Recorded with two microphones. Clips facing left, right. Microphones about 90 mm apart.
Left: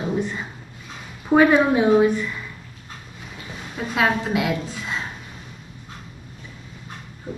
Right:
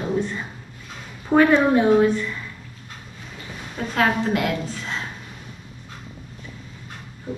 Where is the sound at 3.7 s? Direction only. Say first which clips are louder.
Even; 10° left (ahead or behind).